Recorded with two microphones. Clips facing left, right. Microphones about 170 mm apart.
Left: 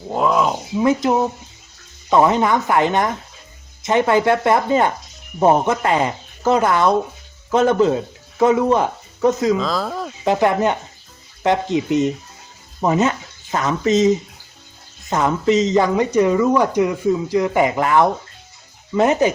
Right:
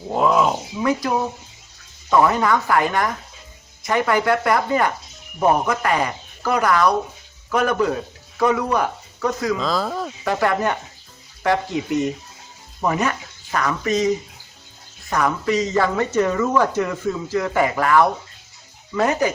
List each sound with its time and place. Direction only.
0.1 s speech: centre (ahead or behind)
0.8 s speech: 25° left (ahead or behind)
9.6 s speech: centre (ahead or behind)
10.2 s speech: 20° left (ahead or behind)